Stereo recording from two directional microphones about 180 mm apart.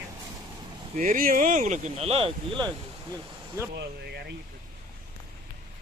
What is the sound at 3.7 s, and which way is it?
Speech, 65° right (ahead or behind).